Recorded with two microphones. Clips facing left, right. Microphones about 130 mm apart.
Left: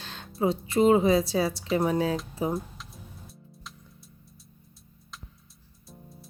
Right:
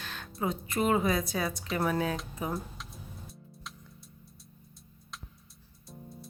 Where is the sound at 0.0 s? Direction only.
30° left (ahead or behind).